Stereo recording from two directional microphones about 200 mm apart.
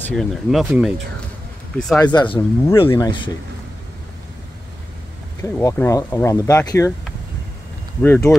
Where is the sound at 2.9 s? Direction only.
20° left (ahead or behind).